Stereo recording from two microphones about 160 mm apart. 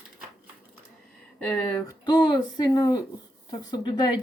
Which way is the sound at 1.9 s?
25° left (ahead or behind).